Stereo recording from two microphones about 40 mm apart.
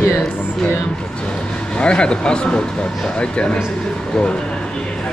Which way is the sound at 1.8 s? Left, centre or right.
Left.